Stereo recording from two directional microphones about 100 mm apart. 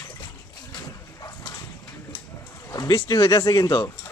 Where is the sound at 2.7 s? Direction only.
40° left (ahead or behind).